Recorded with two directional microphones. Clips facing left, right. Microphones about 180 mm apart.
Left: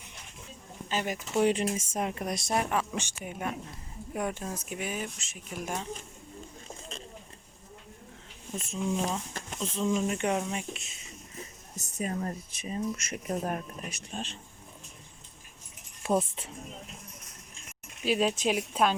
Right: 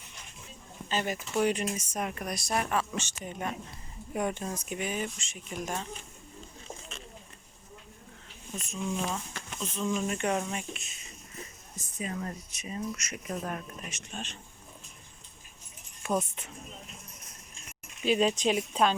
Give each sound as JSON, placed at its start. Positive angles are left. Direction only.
{"t": 0.9, "sound": "speech", "side_deg": 10}
{"t": 1.4, "sound": "speech", "side_deg": 25}
{"t": 8.5, "sound": "speech", "side_deg": 30}
{"t": 10.6, "sound": "speech", "side_deg": 25}
{"t": 11.9, "sound": "speech", "side_deg": 40}
{"t": 16.0, "sound": "speech", "side_deg": 30}
{"t": 18.0, "sound": "speech", "side_deg": 5}